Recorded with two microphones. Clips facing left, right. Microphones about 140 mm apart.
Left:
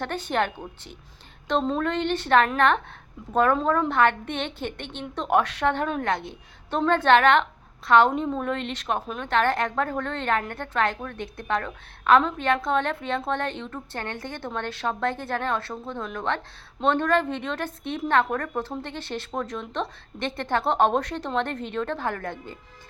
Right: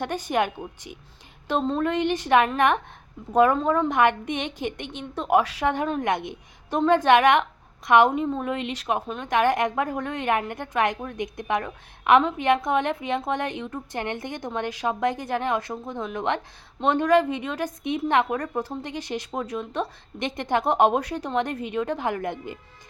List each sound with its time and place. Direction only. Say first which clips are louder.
0.0 s a woman's voice: right 1 dB; 10° right (ahead or behind)
1.6 s speech: right 1 dB; centre (ahead or behind)
1.9 s a woman's voice: right 1 dB; 10° right (ahead or behind)
8.1 s a woman's voice: right 1 dB; 5° right (ahead or behind)